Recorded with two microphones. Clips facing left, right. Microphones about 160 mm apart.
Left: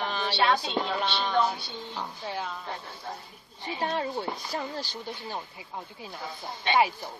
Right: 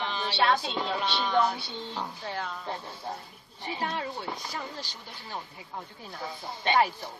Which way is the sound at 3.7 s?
30° left (ahead or behind).